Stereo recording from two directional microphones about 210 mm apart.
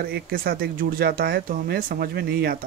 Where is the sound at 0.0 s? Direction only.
45° right (ahead or behind).